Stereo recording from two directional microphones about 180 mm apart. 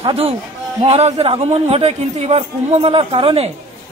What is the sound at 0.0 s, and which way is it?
Speech, 30° right (ahead or behind).